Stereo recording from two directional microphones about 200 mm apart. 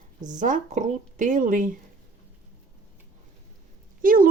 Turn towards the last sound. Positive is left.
turn(degrees=-45)  # may be behind; listen again after turning